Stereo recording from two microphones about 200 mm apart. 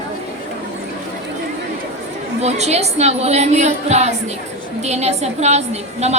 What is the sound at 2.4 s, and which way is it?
A woman's voice, 35° right (ahead or behind).